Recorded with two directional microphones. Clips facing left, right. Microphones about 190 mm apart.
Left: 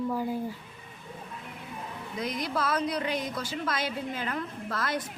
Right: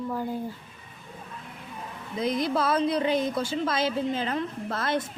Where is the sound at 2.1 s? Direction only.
25° right (ahead or behind).